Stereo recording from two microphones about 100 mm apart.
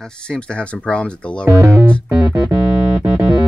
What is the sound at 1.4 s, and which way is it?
Speech, 25° right (ahead or behind).